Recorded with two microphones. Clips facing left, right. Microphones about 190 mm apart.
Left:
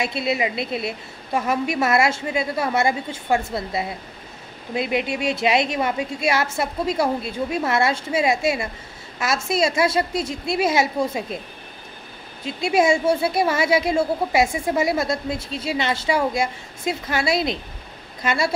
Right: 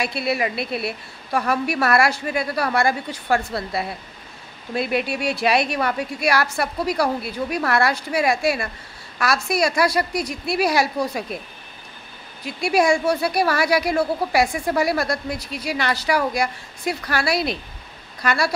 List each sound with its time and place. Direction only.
0.0 s a woman's voice: 20° left (ahead or behind)
12.4 s a woman's voice: 25° left (ahead or behind)